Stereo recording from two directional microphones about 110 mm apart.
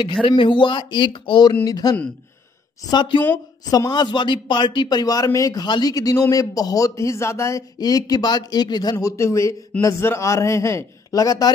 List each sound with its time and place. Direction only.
0.2 s a man's voice: 50° left (ahead or behind)
8.9 s a man's voice: 25° left (ahead or behind)